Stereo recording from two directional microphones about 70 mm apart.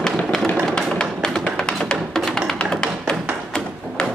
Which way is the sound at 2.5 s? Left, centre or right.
Centre.